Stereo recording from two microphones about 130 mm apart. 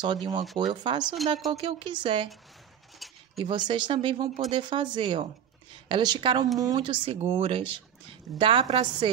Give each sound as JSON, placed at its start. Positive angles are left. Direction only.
{"t": 0.0, "sound": "speech", "side_deg": -35}
{"t": 1.0, "sound": "speech", "side_deg": 0}
{"t": 1.5, "sound": "speech", "side_deg": -45}
{"t": 3.0, "sound": "a sound", "side_deg": 0}
{"t": 3.3, "sound": "speech", "side_deg": -40}
{"t": 7.2, "sound": "a woman's voice", "side_deg": -50}